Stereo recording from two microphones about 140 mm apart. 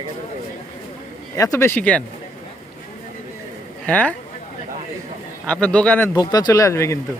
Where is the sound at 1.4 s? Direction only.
20° left (ahead or behind).